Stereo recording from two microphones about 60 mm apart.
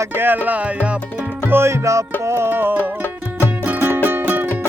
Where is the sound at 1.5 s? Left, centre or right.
Right.